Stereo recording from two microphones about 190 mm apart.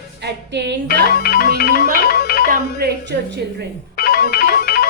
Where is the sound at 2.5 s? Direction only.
55° right (ahead or behind).